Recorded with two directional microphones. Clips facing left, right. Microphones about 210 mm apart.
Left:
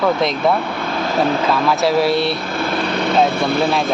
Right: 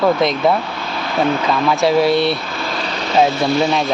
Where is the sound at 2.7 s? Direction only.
55° left (ahead or behind).